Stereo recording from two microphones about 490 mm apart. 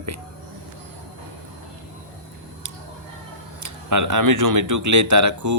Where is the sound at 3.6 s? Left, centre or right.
Right.